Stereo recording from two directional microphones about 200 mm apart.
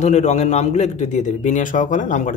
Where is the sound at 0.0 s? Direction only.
35° left (ahead or behind).